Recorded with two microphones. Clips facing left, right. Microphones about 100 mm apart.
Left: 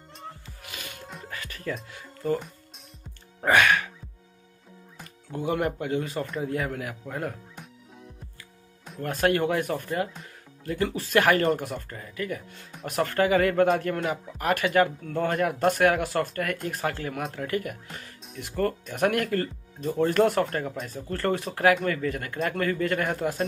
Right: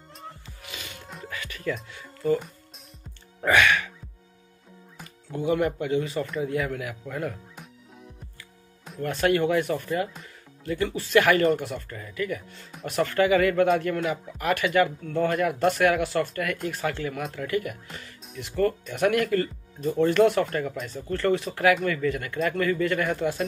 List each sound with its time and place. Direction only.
0.7 s music: 50° left (ahead or behind)
1.3 s music: 40° left (ahead or behind)
3.3 s music: 45° left (ahead or behind)
4.9 s music: centre (ahead or behind)
5.4 s speech: 50° left (ahead or behind)
6.2 s speech: 5° right (ahead or behind)
6.5 s speech: 45° left (ahead or behind)
9.0 s speech: 45° left (ahead or behind)